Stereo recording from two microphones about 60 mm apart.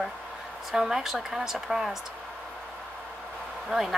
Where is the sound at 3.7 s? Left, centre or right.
Centre.